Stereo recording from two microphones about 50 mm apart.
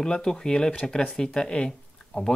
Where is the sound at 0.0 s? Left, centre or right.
Centre.